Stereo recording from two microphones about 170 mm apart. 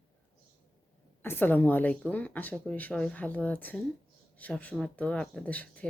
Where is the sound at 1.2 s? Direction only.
10° left (ahead or behind).